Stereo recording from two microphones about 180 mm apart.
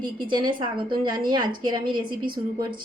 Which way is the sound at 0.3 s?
25° right (ahead or behind).